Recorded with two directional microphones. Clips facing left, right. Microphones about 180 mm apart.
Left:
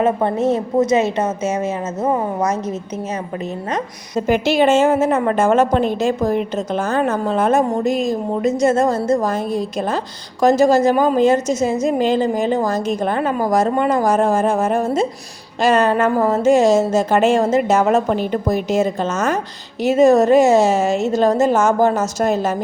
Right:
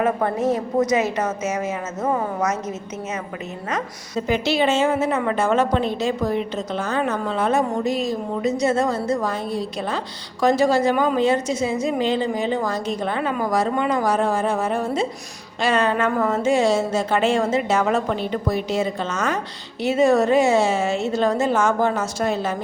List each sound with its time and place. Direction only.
0.0 s a woman's voice: 25° left (ahead or behind)
4.3 s a woman's voice: 50° left (ahead or behind)